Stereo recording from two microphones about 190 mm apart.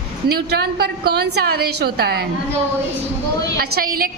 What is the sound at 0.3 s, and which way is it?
A woman's voice, 55° right (ahead or behind).